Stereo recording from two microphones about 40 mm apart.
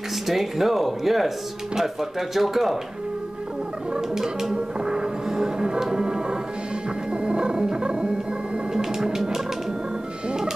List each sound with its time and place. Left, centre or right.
0.3 s speech: centre
3.9 s speech: centre
4.6 s music: centre
7.1 s dog: right
8.7 s music: centre